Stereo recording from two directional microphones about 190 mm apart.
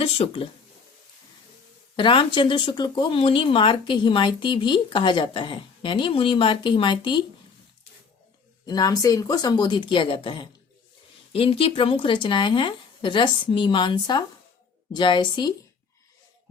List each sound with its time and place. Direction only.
0.0 s speech: 30° left (ahead or behind)
2.0 s speech: 25° left (ahead or behind)
8.6 s speech: 20° left (ahead or behind)